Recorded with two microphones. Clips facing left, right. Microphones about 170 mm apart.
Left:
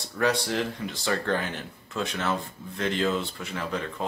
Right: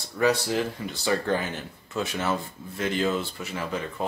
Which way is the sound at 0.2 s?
5° right (ahead or behind).